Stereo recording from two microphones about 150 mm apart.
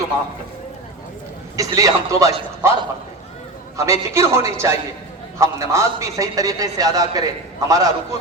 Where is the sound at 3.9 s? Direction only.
20° right (ahead or behind).